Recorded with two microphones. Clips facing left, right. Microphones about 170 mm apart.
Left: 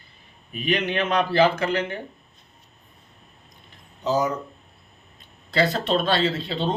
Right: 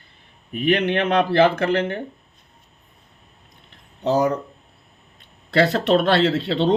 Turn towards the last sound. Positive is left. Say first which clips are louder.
# right 6 dB
turn(degrees=-75)  # may be behind; listen again after turning